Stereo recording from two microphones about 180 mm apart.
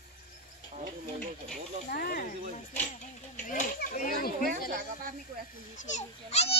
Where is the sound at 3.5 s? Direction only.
50° left (ahead or behind).